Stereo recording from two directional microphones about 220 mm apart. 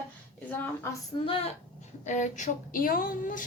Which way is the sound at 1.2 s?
25° left (ahead or behind).